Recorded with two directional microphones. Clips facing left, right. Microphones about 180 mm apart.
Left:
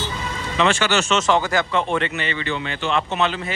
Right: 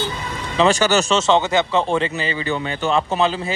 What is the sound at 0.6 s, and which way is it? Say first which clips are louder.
Speech: right 4 dB; 40° right (ahead or behind).